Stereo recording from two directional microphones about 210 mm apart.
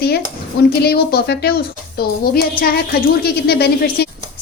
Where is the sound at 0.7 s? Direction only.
50° left (ahead or behind).